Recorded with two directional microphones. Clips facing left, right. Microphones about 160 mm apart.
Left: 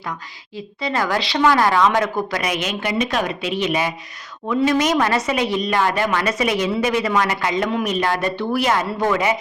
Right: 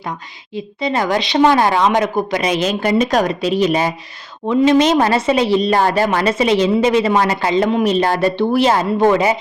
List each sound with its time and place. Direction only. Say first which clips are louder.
0.0 s speech: right 3 dB; 20° right (ahead or behind); by 3.9 s 40° right (ahead or behind)
4.4 s speech: right 6 dB; 25° right (ahead or behind)